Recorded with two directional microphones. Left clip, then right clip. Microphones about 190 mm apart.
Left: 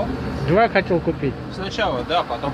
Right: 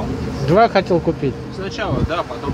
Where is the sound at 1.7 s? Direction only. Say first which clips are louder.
Left 2 dB; 45° left (ahead or behind).